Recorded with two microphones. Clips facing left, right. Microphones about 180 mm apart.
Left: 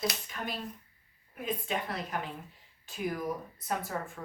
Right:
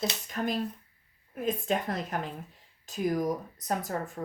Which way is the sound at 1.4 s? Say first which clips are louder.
Right 5 dB; 45° right (ahead or behind).